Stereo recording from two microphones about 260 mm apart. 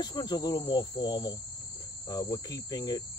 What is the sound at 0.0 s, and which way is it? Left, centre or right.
Speech, centre.